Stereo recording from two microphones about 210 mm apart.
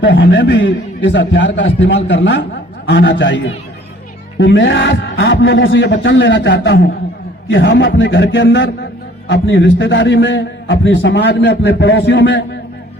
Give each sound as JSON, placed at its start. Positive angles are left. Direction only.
{"t": 0.0, "sound": "a man's voice", "side_deg": 60}